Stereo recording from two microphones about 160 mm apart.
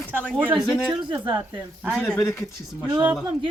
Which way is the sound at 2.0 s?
15° left (ahead or behind).